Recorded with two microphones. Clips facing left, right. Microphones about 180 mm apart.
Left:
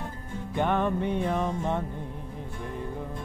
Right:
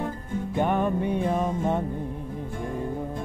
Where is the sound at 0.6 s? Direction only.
15° right (ahead or behind).